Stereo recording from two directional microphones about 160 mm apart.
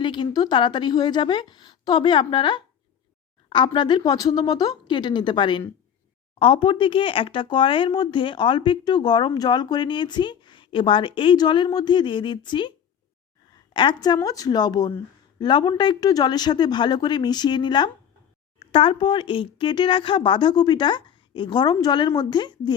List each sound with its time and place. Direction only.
0.0 s speech: 30° left (ahead or behind)
13.7 s speech: 25° left (ahead or behind)